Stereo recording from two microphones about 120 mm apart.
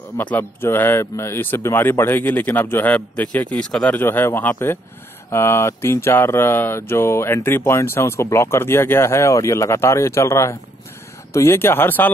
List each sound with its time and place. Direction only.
0.2 s speech: 15° left (ahead or behind)